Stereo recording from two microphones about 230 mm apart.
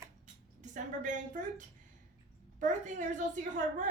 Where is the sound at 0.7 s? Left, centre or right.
Right.